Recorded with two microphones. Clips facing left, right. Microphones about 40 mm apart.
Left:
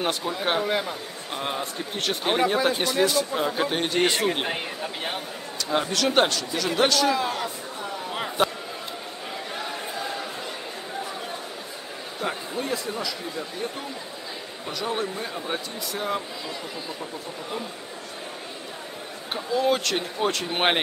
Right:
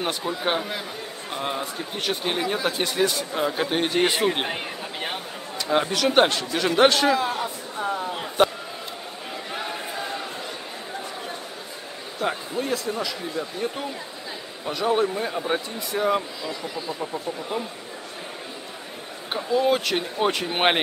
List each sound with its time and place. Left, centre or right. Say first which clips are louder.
0.0 s speech: even; centre
2.2 s speech: left 5 dB; centre
2.8 s speech: left 1 dB; centre
5.7 s speech: right 2 dB; centre
6.2 s speech: right 3 dB; right
7.1 s speech: right 2 dB; centre
9.5 s a sound: right 3 dB; centre
12.2 s speech: right 3 dB; centre
14.9 s speech: right 7 dB; centre
19.3 s speech: right 2 dB; centre